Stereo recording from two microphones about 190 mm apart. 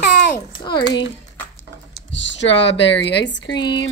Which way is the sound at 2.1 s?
70° left (ahead or behind).